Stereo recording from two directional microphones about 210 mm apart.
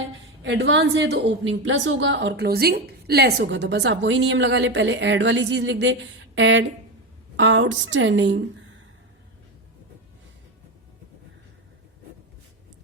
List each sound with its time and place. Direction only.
0.4 s a woman's voice: 60° right (ahead or behind)